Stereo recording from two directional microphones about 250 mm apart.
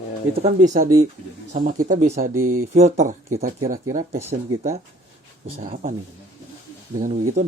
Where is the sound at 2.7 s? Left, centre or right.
Right.